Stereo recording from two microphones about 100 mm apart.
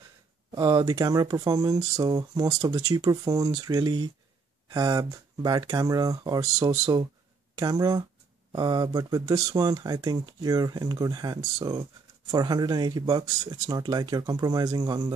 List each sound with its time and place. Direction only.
0.5 s speech: 45° right (ahead or behind)